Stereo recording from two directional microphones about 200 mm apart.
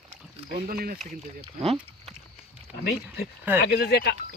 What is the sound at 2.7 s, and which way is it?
Speech, 50° left (ahead or behind).